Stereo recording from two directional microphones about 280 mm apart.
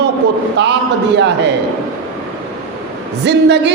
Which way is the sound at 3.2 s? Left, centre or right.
Right.